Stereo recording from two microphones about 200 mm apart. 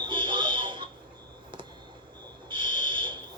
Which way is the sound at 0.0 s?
25° right (ahead or behind).